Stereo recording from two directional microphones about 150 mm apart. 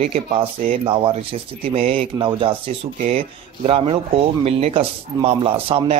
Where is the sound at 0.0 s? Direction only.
50° right (ahead or behind).